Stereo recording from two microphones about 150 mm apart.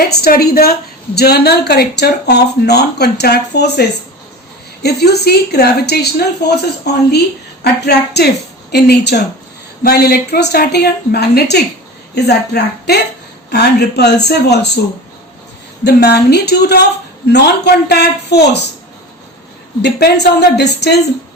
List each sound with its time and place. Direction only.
0.2 s a woman's voice: 85° left
15.8 s a woman's voice: 90° left
19.8 s a woman's voice: 90° left